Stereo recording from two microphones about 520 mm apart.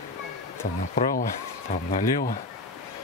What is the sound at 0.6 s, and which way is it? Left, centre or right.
Speech, centre.